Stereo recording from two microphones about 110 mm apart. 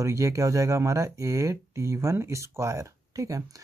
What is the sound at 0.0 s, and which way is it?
Speech, 30° right (ahead or behind).